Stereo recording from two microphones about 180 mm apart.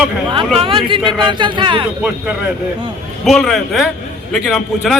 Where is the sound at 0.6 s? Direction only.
30° right (ahead or behind).